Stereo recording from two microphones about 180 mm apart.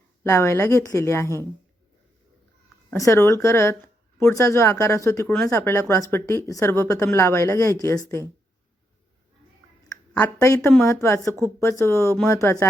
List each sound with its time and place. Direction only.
0.3 s speech: 15° left (ahead or behind)
2.9 s speech: 15° left (ahead or behind)
10.2 s speech: 15° left (ahead or behind)